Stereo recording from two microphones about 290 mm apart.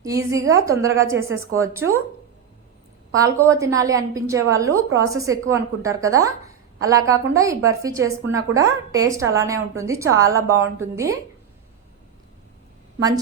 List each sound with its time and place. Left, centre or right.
0.0 s a woman's voice: centre
1.1 s a woman's voice: right
1.5 s a woman's voice: centre
3.2 s a woman's voice: centre